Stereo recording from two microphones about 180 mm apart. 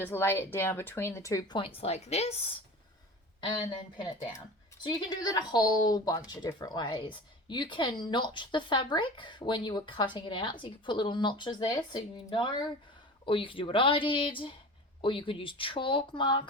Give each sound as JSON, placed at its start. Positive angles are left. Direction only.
{"t": 0.0, "sound": "speech", "side_deg": 15}
{"t": 4.8, "sound": "speech", "side_deg": 25}